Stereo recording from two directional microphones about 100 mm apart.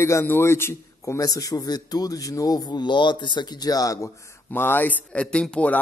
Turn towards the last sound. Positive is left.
turn(degrees=10)  # may be behind; listen again after turning